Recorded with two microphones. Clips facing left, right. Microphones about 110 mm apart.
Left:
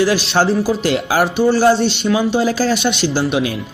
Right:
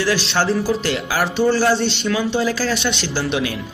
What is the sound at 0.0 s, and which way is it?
Speech, 25° left (ahead or behind).